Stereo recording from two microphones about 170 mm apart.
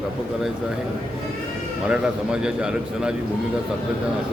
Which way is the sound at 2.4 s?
5° right (ahead or behind).